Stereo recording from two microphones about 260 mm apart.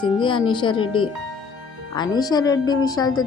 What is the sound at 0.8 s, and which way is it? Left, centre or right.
Speech, left.